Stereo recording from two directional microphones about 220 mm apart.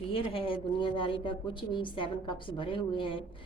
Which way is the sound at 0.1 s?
25° left (ahead or behind).